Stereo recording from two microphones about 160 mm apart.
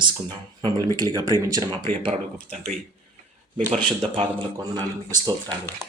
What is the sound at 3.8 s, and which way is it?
Speech, 30° right (ahead or behind).